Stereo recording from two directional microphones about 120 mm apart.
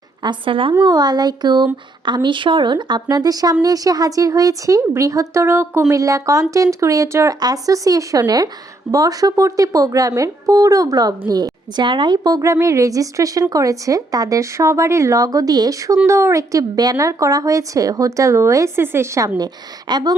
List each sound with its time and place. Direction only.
0.2 s speech: 40° right (ahead or behind)
0.7 s speech: 30° right (ahead or behind)
19.9 s speech: 35° right (ahead or behind)